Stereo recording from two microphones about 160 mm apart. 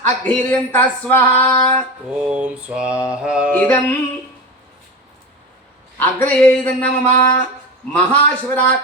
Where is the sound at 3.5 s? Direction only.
10° left (ahead or behind).